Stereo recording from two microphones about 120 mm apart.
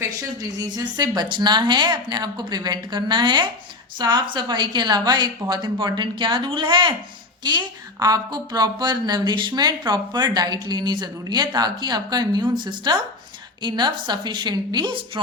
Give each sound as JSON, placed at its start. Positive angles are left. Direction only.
{"t": 0.7, "sound": "a woman's voice", "side_deg": -35}